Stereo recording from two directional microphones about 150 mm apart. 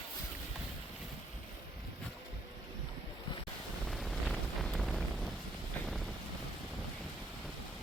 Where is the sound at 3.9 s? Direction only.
Centre (ahead or behind).